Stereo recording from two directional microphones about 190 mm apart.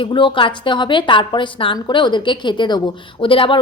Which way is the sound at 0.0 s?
25° left (ahead or behind).